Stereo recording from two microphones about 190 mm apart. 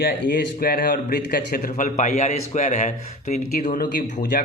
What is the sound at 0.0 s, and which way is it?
A man's voice, 60° left (ahead or behind).